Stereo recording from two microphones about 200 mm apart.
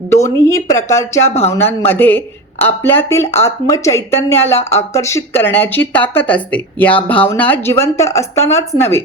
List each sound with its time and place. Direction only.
0.4 s speech: 15° left (ahead or behind)
1.3 s speech: 30° left (ahead or behind)
1.9 s speech: 10° left (ahead or behind)